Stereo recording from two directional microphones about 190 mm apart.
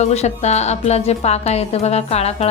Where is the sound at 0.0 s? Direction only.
35° left (ahead or behind).